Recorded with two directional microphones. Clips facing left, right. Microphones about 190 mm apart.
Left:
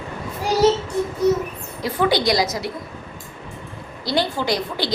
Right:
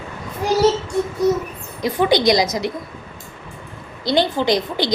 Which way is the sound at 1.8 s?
20° right (ahead or behind).